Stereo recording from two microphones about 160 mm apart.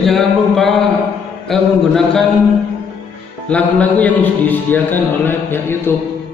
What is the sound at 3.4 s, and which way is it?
A man's voice, 10° left (ahead or behind).